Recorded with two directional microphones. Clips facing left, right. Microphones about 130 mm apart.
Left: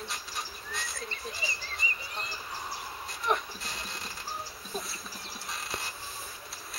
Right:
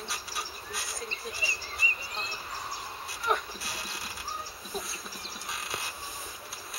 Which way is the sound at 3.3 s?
5° right (ahead or behind).